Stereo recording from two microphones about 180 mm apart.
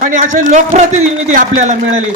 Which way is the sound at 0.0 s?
45° right (ahead or behind).